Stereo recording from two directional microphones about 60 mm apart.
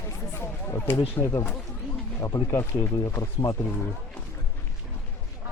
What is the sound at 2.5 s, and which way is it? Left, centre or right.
Speech, left.